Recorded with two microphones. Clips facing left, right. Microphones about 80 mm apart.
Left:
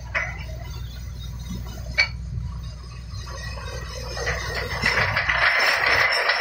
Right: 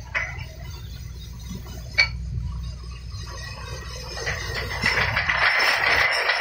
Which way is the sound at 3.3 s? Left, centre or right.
Left.